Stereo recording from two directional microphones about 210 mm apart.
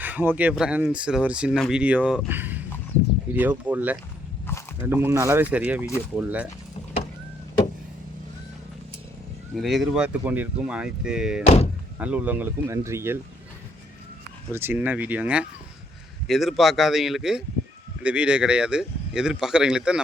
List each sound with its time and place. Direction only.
0.0 s speech: 10° right (ahead or behind)
9.6 s speech: centre (ahead or behind)
11.4 s speech: 30° left (ahead or behind)
11.9 s speech: 5° right (ahead or behind)
14.5 s speech: 10° right (ahead or behind)